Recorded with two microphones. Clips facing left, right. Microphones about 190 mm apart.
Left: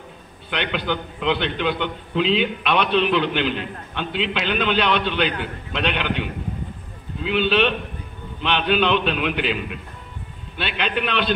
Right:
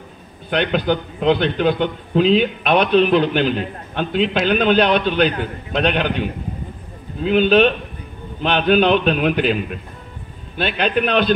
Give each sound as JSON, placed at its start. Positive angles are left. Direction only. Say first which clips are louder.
{"t": 0.5, "sound": "a man's voice", "louder": "right 6 dB", "side_deg": -45}